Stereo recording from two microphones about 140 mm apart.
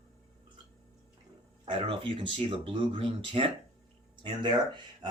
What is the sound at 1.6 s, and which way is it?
Speech, 35° right (ahead or behind).